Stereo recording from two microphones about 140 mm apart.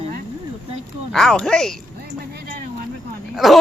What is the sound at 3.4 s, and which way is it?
Speech, centre (ahead or behind).